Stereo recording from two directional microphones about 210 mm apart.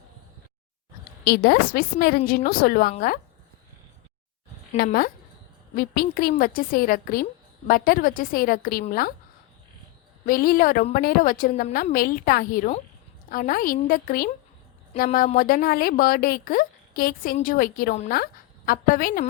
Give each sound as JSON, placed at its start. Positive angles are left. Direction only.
{"t": 1.2, "sound": "a woman's voice", "side_deg": 50}
{"t": 4.8, "sound": "a woman's voice", "side_deg": 45}
{"t": 10.2, "sound": "a woman's voice", "side_deg": 45}